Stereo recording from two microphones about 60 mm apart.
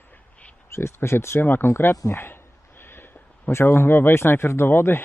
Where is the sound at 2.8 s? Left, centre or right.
Left.